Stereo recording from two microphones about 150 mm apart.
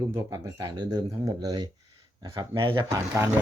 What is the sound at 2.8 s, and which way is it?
Speech, 20° right (ahead or behind).